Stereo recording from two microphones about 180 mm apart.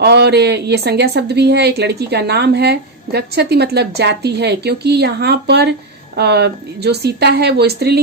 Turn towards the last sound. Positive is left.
turn(degrees=-65)  # may be behind; listen again after turning